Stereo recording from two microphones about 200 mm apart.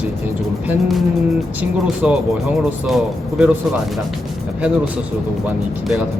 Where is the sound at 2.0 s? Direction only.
5° right (ahead or behind).